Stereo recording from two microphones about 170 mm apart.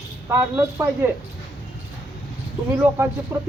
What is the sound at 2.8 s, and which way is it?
Speech, 15° right (ahead or behind).